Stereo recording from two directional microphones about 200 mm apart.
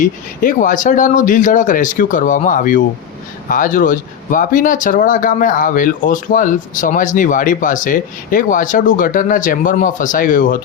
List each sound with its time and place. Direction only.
0.0 s speech: 40° left (ahead or behind)